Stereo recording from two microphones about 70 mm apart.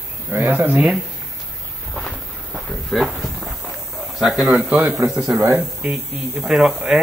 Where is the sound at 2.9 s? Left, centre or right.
Centre.